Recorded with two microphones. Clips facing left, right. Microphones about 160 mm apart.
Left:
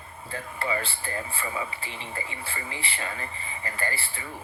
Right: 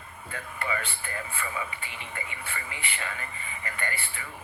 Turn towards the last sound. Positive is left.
turn(degrees=30)  # may be behind; listen again after turning